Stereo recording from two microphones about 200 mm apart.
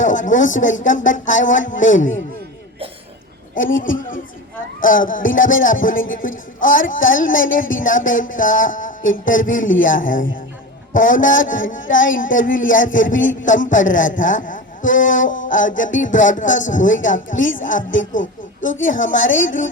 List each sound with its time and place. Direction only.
0.0 s a man's voice: 40° left (ahead or behind)
4.8 s a man's voice: 40° left (ahead or behind)
18.1 s a sound: 40° left (ahead or behind)
18.9 s a man's voice: 40° left (ahead or behind)